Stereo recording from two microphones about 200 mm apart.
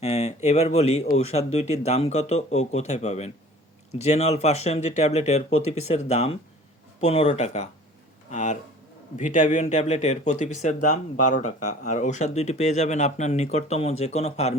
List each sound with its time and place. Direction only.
0.0 s speech: 35° left (ahead or behind)